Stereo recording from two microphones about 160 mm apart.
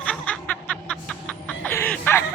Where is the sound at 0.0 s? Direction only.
5° left (ahead or behind).